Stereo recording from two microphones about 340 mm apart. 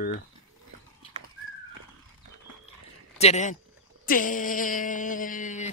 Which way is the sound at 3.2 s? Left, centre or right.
Centre.